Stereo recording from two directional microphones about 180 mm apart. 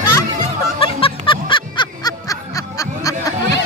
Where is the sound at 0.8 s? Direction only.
30° left (ahead or behind).